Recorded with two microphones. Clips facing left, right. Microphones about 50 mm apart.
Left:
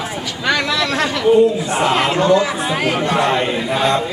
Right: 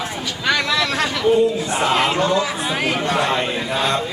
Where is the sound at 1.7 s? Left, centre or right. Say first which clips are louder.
Left 2 dB; left.